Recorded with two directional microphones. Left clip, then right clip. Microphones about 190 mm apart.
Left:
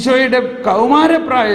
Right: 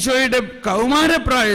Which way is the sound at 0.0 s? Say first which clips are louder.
Left 5 dB; 35° right (ahead or behind).